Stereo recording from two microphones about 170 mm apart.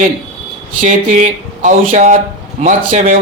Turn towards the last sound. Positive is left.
turn(degrees=-45)  # may be behind; listen again after turning